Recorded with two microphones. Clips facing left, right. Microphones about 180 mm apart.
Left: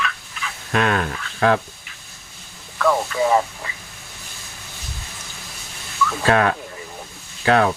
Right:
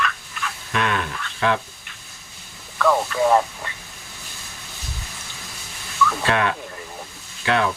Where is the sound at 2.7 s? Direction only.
Centre (ahead or behind).